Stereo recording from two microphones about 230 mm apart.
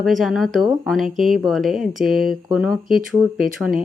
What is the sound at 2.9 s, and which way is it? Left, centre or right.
Speech, right.